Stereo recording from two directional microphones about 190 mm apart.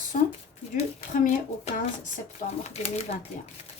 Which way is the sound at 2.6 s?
35° left (ahead or behind).